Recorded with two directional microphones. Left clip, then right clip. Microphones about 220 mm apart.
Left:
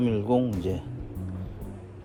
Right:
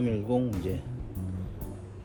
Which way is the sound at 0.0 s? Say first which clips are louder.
Left 4 dB; 20° left (ahead or behind).